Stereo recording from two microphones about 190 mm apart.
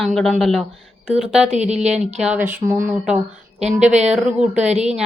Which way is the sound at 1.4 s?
35° right (ahead or behind).